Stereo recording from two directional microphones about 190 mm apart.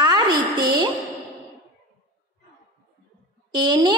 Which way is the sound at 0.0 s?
20° right (ahead or behind).